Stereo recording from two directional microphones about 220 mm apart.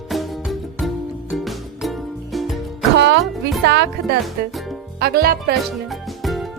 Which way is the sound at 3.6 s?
50° right (ahead or behind).